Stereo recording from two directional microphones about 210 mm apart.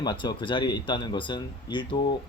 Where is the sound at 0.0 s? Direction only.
20° left (ahead or behind).